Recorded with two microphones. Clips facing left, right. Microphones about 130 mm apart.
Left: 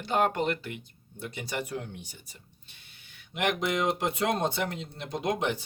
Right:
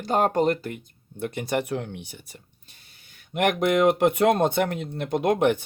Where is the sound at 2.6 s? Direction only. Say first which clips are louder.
Right 1 dB; 40° right (ahead or behind).